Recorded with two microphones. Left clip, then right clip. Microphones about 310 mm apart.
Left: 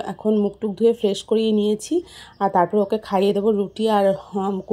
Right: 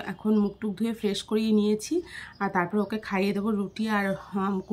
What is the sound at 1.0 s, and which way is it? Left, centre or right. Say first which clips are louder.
Speech: left 8 dB; centre.